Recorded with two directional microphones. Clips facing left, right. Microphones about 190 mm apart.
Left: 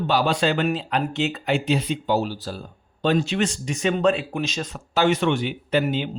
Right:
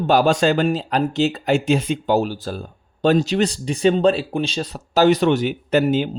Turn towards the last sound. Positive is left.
turn(degrees=-45)  # may be behind; listen again after turning